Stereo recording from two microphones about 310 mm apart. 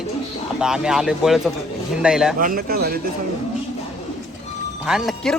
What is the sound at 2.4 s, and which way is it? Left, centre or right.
Speech, right.